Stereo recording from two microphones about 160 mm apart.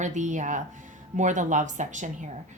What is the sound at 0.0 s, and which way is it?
A woman's voice, 50° right (ahead or behind).